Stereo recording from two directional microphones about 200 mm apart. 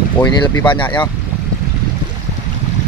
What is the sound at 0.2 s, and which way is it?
Speech, 15° left (ahead or behind).